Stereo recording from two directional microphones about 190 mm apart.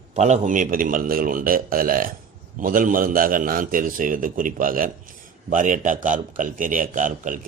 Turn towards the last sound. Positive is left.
turn(degrees=-45)  # may be behind; listen again after turning